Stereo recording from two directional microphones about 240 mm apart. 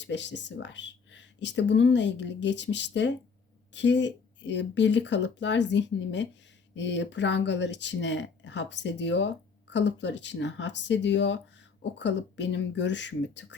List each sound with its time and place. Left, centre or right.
0.0 s speech: left